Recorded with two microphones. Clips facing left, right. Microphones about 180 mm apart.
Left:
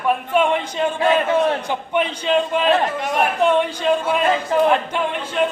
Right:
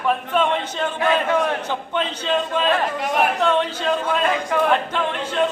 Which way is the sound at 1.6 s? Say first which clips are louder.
Left 3 dB; 15° left (ahead or behind).